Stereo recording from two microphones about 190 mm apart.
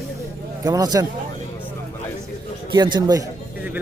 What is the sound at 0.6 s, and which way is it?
Speech, 20° right (ahead or behind).